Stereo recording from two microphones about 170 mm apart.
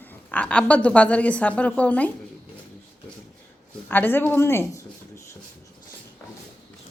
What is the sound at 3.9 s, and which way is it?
Speech, 10° left (ahead or behind).